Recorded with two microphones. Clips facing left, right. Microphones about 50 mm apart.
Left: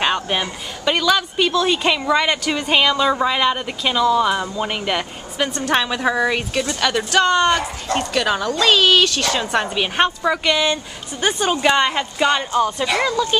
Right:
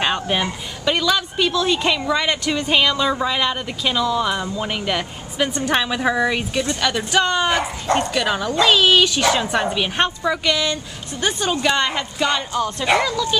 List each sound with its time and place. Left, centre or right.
0.0 s a woman's voice: centre
9.5 s speech: centre
13.0 s speech: left